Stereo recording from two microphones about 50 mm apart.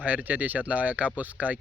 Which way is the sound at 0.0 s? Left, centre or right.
Right.